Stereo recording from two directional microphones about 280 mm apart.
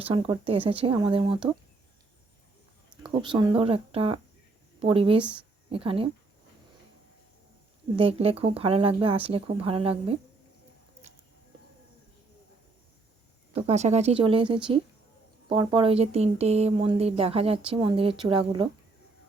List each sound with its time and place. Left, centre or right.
0.0 s speech: centre
3.0 s speech: centre
5.2 s speech: centre
5.7 s speech: centre
7.9 s speech: centre
13.5 s speech: right